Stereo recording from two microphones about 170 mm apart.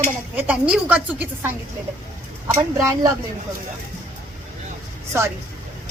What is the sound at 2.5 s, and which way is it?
Speech, 15° right (ahead or behind).